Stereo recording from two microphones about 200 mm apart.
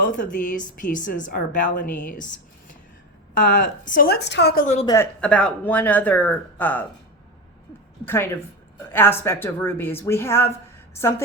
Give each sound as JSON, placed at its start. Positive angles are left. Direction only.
{"t": 0.0, "sound": "speech", "side_deg": 40}
{"t": 3.4, "sound": "speech", "side_deg": 40}
{"t": 4.6, "sound": "speech", "side_deg": 35}
{"t": 5.2, "sound": "speech", "side_deg": 5}
{"t": 8.0, "sound": "speech", "side_deg": 10}